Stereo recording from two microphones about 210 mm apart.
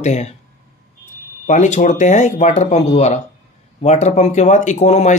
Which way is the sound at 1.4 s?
35° left (ahead or behind).